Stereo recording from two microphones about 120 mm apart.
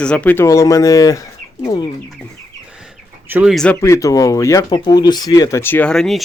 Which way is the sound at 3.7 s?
25° left (ahead or behind).